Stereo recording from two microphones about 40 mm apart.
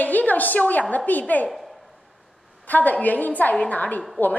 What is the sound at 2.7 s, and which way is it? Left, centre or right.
A woman's voice, left.